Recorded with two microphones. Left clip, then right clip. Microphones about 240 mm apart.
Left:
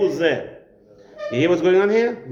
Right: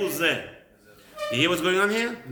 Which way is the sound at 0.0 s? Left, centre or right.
Centre.